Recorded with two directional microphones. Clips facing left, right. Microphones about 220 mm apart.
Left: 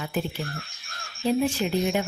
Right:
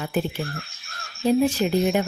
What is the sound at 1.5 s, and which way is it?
Speech, 40° right (ahead or behind).